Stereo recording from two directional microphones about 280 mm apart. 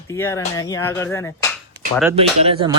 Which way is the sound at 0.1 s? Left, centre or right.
Centre.